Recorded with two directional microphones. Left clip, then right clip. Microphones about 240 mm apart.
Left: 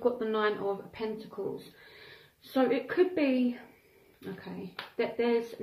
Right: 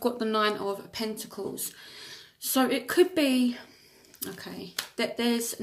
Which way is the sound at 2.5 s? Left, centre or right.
Right.